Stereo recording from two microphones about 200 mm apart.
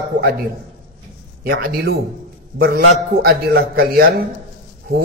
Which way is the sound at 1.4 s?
50° right (ahead or behind).